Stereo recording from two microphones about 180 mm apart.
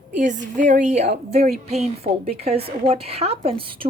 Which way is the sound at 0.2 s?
45° right (ahead or behind).